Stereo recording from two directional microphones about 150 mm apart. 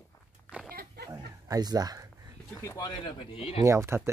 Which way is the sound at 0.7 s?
90° right.